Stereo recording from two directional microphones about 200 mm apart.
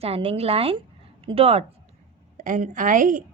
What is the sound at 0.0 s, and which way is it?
A woman's voice, 30° right (ahead or behind).